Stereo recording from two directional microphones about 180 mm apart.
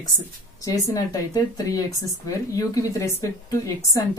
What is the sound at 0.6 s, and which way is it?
Speech, 20° left (ahead or behind).